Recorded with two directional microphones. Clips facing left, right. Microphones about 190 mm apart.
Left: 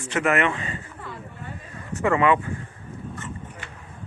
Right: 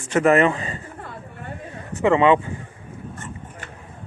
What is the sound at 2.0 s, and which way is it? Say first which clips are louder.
Speech: right 4 dB; 25° right (ahead or behind).